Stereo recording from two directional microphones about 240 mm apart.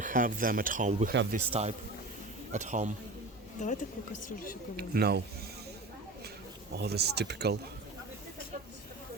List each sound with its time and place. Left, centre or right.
0.0 s speech: right
3.6 s a woman's voice: left
4.8 s speech: right
6.7 s speech: right